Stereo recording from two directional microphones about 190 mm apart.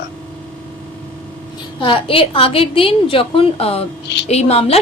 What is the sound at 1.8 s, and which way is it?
A woman's voice, 30° left (ahead or behind).